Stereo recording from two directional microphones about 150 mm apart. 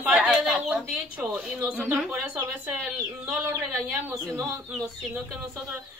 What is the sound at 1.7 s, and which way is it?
A woman's voice, 5° right (ahead or behind).